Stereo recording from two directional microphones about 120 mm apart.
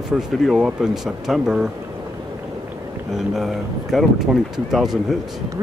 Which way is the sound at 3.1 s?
Centre (ahead or behind).